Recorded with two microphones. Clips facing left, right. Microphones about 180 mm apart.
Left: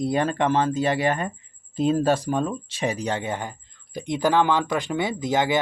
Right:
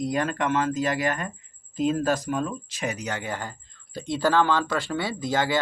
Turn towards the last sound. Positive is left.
turn(degrees=20)  # may be behind; listen again after turning